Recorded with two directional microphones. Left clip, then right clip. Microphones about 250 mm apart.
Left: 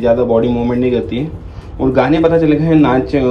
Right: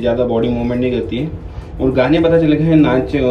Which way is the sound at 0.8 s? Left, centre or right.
Left.